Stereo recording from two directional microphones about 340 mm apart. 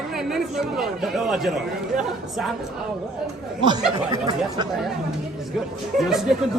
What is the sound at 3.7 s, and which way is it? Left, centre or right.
Speech, centre.